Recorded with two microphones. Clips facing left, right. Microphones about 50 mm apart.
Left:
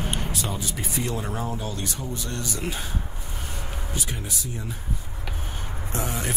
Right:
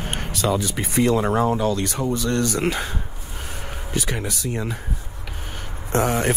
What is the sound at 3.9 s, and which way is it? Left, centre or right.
Speech, right.